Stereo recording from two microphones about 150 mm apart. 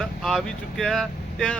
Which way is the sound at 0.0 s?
Centre (ahead or behind).